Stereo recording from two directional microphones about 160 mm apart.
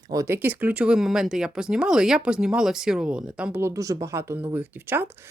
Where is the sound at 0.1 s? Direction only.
20° right (ahead or behind).